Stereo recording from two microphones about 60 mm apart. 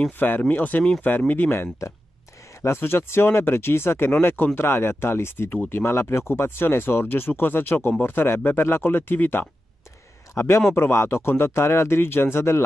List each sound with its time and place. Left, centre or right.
0.2 s a man's voice: left